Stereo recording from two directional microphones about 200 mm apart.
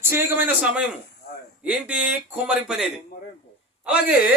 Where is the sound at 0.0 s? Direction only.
10° right (ahead or behind).